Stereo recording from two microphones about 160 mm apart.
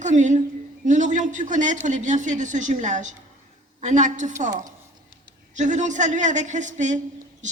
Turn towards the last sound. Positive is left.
turn(degrees=-50)  # may be behind; listen again after turning